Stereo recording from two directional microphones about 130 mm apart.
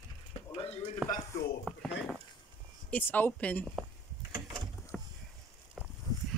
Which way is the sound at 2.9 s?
15° left (ahead or behind).